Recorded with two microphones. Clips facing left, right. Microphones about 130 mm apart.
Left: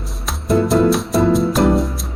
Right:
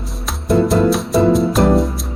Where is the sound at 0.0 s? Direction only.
Centre (ahead or behind).